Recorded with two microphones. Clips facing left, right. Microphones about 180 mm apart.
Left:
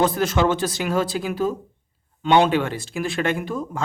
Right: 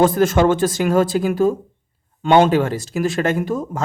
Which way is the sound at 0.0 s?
50° right (ahead or behind).